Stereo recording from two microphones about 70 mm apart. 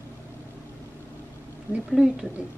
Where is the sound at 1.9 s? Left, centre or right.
Centre.